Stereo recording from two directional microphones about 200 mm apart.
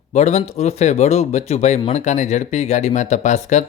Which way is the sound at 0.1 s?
35° left (ahead or behind).